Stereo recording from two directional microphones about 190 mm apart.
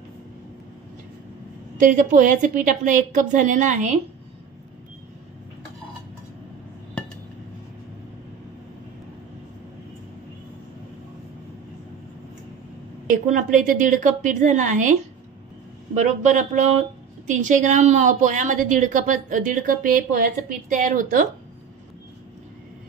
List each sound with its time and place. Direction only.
1.8 s a woman's voice: 45° right (ahead or behind)
13.1 s a woman's voice: 45° right (ahead or behind)